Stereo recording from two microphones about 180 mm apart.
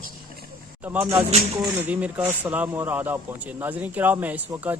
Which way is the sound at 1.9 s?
10° right (ahead or behind).